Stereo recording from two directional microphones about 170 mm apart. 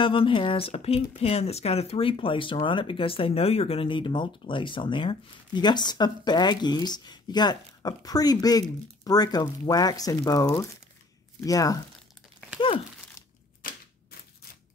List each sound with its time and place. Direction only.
0.0 s speech: 30° left (ahead or behind)
12.5 s speech: 30° left (ahead or behind)